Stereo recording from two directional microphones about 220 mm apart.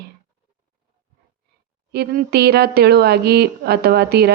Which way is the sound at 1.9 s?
45° right (ahead or behind).